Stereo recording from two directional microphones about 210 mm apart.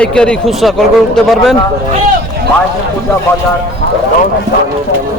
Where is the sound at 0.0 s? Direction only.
5° left (ahead or behind).